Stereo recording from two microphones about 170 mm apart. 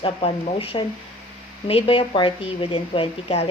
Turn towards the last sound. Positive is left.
turn(degrees=35)  # may be behind; listen again after turning